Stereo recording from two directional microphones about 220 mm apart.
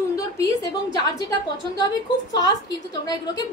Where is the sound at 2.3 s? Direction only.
20° left (ahead or behind).